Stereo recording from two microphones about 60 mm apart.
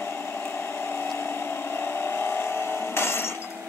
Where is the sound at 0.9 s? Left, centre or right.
Left.